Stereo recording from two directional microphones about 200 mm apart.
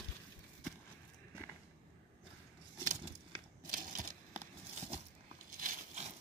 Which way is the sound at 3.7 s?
40° right (ahead or behind).